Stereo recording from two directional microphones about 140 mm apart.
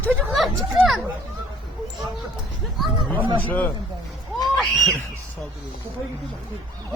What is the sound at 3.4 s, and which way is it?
Speech, 10° left (ahead or behind).